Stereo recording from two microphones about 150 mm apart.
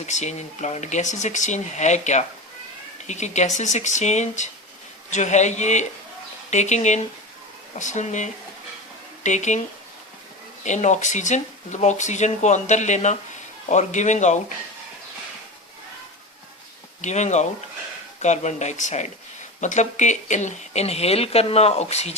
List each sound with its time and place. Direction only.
0.0 s speech: 50° left (ahead or behind)
17.0 s speech: 50° left (ahead or behind)